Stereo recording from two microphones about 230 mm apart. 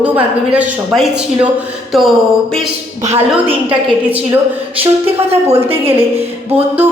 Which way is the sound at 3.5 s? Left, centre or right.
Centre.